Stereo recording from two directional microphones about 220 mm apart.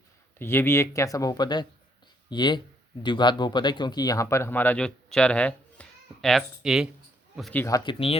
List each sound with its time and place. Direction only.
0.3 s speech: 10° left (ahead or behind)
7.6 s speech: 20° left (ahead or behind)